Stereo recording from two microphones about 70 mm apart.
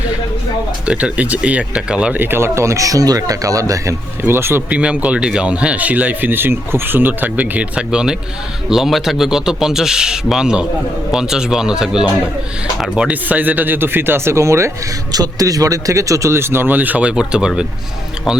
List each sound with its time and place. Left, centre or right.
0.9 s speech: centre
2.1 s speech: right
4.2 s speech: right
4.7 s speech: centre
7.8 s a man's voice: centre
13.1 s speech: right
15.1 s speech: right; by 18.4 s centre